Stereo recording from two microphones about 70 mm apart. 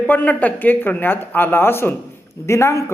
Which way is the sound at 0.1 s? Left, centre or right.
Left.